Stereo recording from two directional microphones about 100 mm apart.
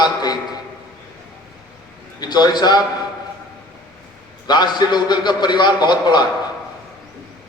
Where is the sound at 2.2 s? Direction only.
45° left (ahead or behind).